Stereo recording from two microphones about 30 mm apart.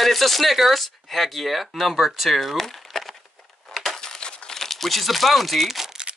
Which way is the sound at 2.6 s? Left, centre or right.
Centre.